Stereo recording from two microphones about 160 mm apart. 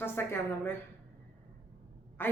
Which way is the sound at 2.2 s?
15° left (ahead or behind).